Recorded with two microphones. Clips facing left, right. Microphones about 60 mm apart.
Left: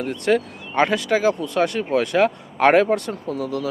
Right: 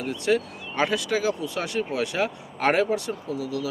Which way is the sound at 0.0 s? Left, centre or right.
Left.